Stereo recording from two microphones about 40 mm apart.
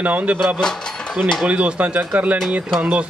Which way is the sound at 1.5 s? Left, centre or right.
Right.